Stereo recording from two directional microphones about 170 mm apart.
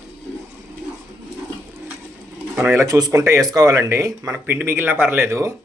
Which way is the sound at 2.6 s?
15° right (ahead or behind).